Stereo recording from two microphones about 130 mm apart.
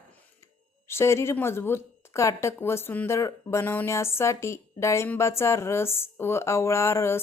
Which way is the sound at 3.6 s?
15° left (ahead or behind).